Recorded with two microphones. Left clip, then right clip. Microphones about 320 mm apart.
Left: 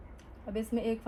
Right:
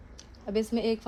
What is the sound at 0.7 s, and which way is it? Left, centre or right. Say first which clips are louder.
Speech: right 1 dB; right.